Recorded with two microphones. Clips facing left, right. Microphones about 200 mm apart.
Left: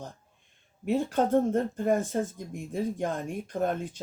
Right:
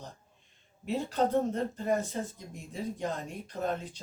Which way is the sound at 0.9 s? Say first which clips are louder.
Left 4 dB; 50° left (ahead or behind).